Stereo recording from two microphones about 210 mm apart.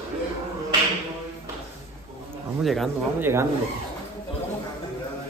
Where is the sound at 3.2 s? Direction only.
10° right (ahead or behind).